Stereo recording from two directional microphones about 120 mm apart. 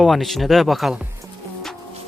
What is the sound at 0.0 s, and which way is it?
Speech, centre (ahead or behind).